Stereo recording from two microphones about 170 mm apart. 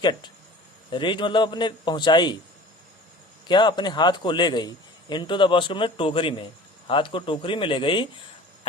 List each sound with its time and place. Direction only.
0.0 s a man's voice: 25° left (ahead or behind)
3.5 s a man's voice: 25° left (ahead or behind)